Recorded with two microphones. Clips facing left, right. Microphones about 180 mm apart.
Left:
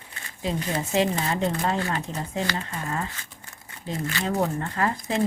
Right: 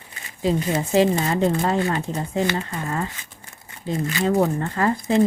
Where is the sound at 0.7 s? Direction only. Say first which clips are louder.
Right 4 dB; 35° right (ahead or behind).